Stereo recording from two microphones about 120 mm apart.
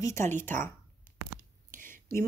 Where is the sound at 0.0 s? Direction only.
20° left (ahead or behind).